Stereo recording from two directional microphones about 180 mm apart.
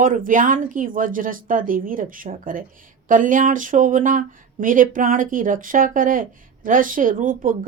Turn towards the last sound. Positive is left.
turn(degrees=-50)  # may be behind; listen again after turning